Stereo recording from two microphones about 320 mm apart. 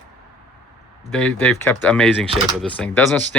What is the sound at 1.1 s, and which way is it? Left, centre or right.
Speech, centre.